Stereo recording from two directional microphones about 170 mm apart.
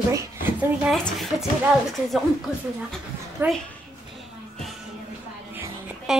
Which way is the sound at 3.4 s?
10° right (ahead or behind).